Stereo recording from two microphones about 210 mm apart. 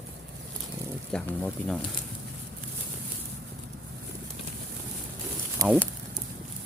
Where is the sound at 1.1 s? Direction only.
5° left (ahead or behind).